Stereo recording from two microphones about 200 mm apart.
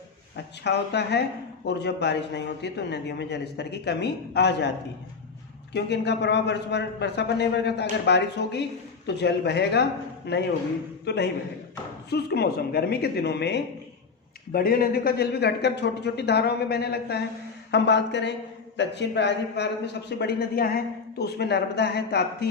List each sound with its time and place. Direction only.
0.3 s a man's voice: 55° left (ahead or behind)
5.7 s a man's voice: 60° left (ahead or behind)
14.5 s a man's voice: 45° left (ahead or behind)